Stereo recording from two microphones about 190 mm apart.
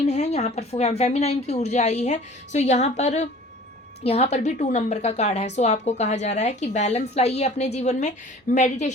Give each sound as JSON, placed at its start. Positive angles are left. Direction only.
{"t": 0.0, "sound": "a woman's voice", "side_deg": 35}